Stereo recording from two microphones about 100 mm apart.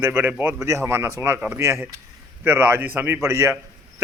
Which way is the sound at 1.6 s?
30° right (ahead or behind).